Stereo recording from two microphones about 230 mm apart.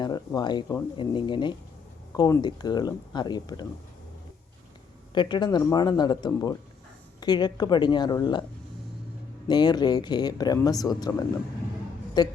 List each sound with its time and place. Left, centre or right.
0.0 s speech: centre
5.1 s speech: centre
9.5 s speech: centre